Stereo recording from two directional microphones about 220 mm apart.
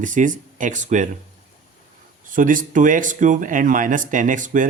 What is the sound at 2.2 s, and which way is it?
Speech, 40° right (ahead or behind).